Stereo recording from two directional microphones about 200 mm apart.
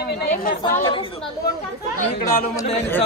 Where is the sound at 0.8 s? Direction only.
25° left (ahead or behind).